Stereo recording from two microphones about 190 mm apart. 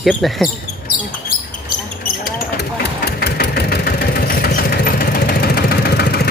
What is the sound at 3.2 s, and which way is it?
Vehicle, 55° left (ahead or behind).